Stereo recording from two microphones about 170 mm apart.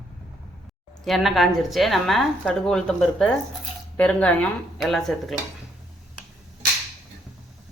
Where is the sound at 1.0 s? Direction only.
Centre (ahead or behind).